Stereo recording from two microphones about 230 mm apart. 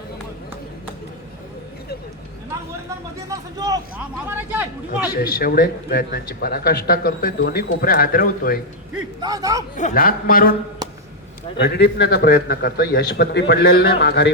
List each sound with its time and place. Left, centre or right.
3.2 s speech: centre
5.1 s speech: left
9.2 s speech: centre
9.7 s speech: left
11.5 s a man's voice: left